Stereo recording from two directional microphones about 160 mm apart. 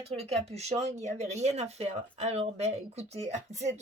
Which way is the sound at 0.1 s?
40° right (ahead or behind).